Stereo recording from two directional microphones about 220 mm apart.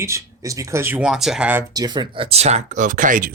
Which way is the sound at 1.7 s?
20° right (ahead or behind).